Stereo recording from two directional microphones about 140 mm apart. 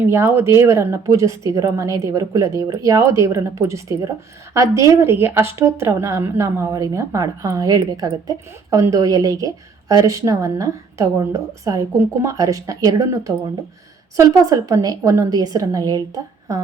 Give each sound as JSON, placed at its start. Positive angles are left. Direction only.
{"t": 0.1, "sound": "speech", "side_deg": -20}